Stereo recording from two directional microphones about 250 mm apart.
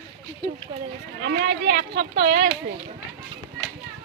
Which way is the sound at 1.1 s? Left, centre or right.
Right.